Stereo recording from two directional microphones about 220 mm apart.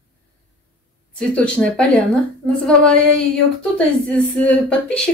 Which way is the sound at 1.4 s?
5° left (ahead or behind).